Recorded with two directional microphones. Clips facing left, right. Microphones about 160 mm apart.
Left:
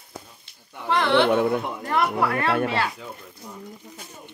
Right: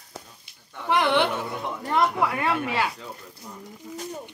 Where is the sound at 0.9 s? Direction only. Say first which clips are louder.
Left 3 dB; 15° right (ahead or behind).